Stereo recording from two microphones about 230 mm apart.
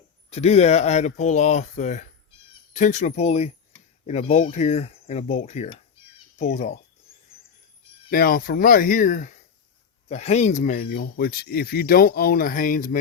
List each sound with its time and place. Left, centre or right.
0.3 s speech: left
6.1 s a sound: left
8.1 s speech: left